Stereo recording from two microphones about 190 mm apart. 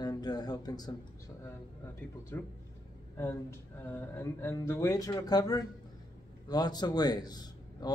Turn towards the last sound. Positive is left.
turn(degrees=20)  # may be behind; listen again after turning